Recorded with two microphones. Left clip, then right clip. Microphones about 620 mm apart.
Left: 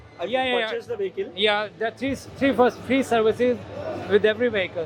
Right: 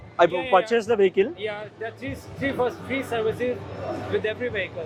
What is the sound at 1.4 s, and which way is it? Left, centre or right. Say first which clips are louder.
A man's voice: left 9 dB; left.